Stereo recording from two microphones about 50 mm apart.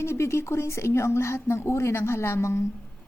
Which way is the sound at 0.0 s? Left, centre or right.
Left.